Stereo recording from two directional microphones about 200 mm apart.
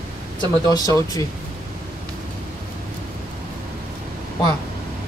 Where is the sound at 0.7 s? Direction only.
20° left (ahead or behind).